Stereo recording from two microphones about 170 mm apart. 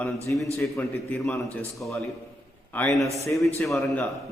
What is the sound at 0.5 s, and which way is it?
Speech, 15° left (ahead or behind).